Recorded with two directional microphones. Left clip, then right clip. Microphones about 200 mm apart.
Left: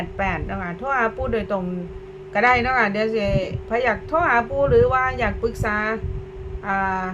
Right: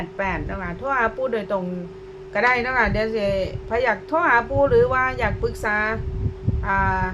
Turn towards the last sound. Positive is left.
turn(degrees=0)  # may be behind; listen again after turning